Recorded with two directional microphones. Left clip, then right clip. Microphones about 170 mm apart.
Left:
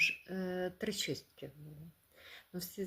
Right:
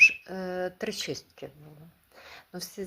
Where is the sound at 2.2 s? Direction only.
25° left (ahead or behind).